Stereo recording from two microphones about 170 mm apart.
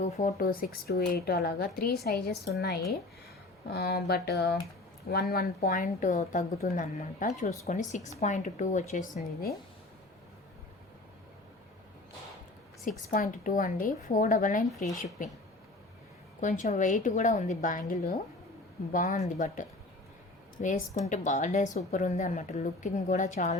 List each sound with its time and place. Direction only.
0.0 s speech: 40° left (ahead or behind)
0.3 s a woman's voice: 60° left (ahead or behind)
12.9 s a woman's voice: 50° left (ahead or behind)
16.4 s a woman's voice: 45° left (ahead or behind)